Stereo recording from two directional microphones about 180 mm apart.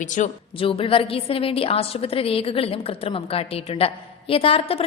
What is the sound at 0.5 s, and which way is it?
A woman's voice, 30° left (ahead or behind).